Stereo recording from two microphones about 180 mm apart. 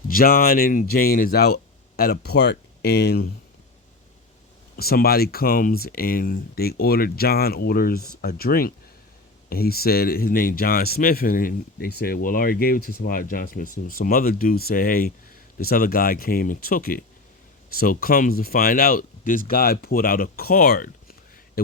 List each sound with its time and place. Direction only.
0.1 s speech: 55° left (ahead or behind)
4.8 s speech: 55° left (ahead or behind)